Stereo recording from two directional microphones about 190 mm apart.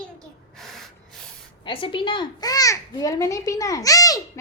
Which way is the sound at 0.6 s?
Centre (ahead or behind).